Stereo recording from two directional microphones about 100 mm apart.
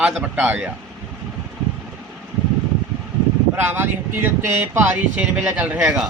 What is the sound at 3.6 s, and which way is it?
A man's voice, 20° right (ahead or behind).